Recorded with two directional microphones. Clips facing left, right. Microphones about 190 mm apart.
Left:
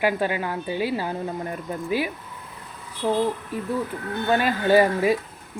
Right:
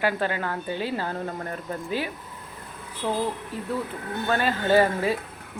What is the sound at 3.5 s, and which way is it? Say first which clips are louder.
A woman's voice: left 3 dB; 15° left (ahead or behind).